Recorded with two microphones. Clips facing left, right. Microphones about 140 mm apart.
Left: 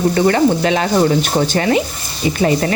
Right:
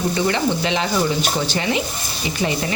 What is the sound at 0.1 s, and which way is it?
Speech, 50° left (ahead or behind).